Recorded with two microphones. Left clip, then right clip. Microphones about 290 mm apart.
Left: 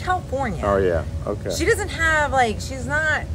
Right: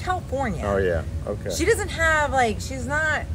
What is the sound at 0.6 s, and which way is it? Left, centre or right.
Speech, centre.